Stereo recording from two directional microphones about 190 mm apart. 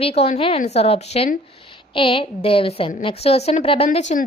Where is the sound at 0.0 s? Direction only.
30° left (ahead or behind).